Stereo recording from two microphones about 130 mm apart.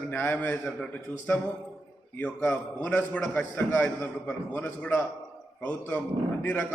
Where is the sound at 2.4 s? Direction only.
10° left (ahead or behind).